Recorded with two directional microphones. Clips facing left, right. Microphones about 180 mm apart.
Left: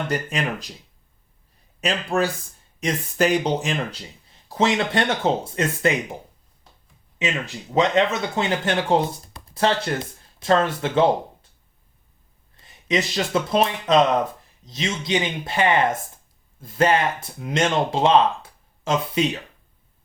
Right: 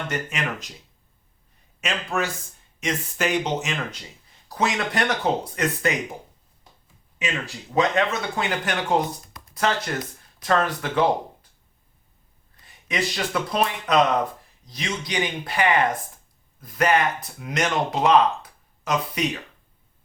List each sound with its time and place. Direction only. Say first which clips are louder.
0.1 s speech: left 3 dB; 35° left (ahead or behind)
1.8 s speech: left 4 dB; 35° left (ahead or behind)
7.2 s speech: left 3 dB; 20° left (ahead or behind)
12.5 s speech: left 4 dB; 25° left (ahead or behind)